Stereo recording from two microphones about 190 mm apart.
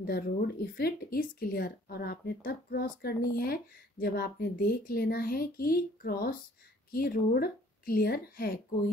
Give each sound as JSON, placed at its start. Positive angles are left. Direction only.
{"t": 0.0, "sound": "speech", "side_deg": 55}